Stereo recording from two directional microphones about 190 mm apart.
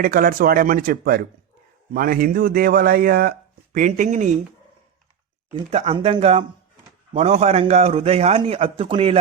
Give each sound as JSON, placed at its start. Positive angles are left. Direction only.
{"t": 0.0, "sound": "speech", "side_deg": -50}
{"t": 5.7, "sound": "a man's voice", "side_deg": -35}